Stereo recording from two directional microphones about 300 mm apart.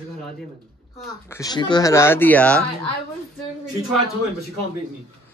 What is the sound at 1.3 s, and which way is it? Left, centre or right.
Speech, centre.